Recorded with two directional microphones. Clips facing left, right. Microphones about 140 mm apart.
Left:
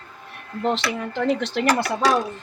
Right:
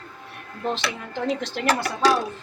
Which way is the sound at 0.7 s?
70° left (ahead or behind).